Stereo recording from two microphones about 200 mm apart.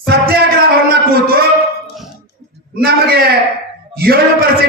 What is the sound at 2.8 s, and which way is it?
A man's voice, 50° right (ahead or behind).